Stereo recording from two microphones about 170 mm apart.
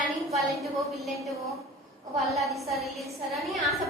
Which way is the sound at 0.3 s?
Centre (ahead or behind).